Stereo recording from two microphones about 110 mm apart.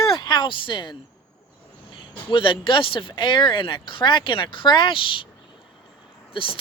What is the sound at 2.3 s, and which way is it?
Speech, 50° left (ahead or behind).